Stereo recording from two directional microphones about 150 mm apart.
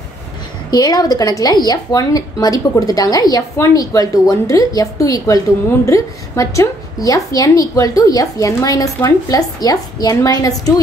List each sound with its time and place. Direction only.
0.7 s speech: 25° left (ahead or behind)